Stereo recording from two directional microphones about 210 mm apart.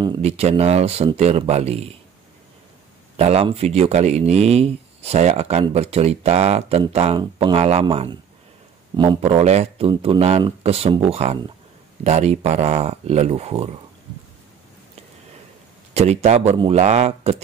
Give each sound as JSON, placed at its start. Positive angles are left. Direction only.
{"t": 0.0, "sound": "speech", "side_deg": -25}
{"t": 3.2, "sound": "speech", "side_deg": -30}
{"t": 15.9, "sound": "speech", "side_deg": -30}